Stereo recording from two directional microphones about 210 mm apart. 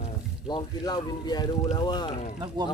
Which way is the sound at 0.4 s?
20° left (ahead or behind).